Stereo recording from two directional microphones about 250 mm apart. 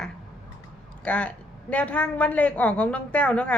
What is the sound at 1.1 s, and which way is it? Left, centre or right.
Speech, centre.